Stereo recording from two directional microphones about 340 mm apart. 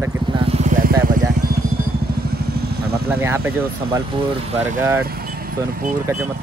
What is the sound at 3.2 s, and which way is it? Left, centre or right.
Speech, centre.